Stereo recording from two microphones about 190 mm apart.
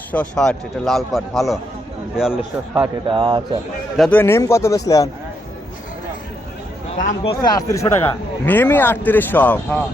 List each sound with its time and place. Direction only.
0.1 s a man's voice: 5° left (ahead or behind)
3.1 s speech: 25° right (ahead or behind)
3.9 s a man's voice: centre (ahead or behind)
4.2 s speech: 15° left (ahead or behind)
7.3 s speech: 20° left (ahead or behind)